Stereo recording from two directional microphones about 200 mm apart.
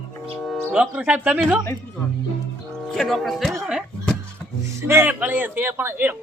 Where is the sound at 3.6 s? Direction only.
5° right (ahead or behind).